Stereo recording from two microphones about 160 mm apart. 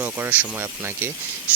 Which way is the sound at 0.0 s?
10° right (ahead or behind).